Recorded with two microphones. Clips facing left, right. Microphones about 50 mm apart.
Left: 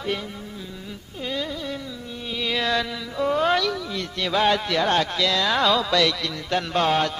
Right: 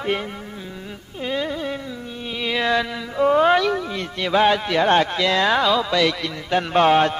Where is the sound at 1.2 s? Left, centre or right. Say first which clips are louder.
Right 4 dB; right.